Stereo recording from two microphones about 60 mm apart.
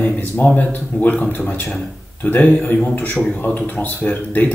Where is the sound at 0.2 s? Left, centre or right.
Left.